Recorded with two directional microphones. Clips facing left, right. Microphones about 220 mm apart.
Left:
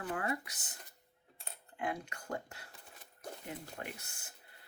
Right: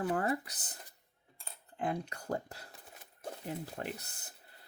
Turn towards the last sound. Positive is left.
turn(degrees=-35)  # may be behind; listen again after turning